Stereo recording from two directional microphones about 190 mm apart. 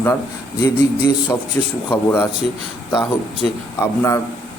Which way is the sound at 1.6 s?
10° left (ahead or behind).